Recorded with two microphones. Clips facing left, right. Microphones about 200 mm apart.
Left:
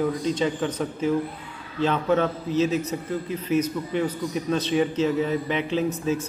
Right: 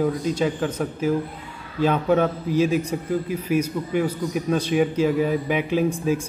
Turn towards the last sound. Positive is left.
turn(degrees=-10)  # may be behind; listen again after turning